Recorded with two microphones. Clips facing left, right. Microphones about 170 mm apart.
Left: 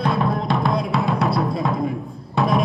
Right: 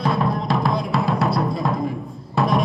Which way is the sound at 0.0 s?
Centre (ahead or behind).